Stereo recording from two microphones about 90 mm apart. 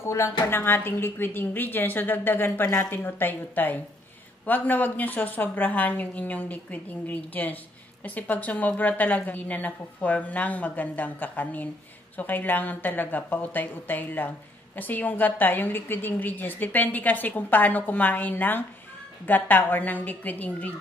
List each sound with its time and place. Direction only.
0.0 s a woman's voice: 30° left (ahead or behind)